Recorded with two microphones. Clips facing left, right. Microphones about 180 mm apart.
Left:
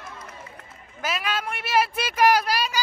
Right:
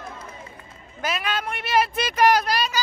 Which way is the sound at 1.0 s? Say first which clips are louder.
Right 1 dB; 5° left (ahead or behind).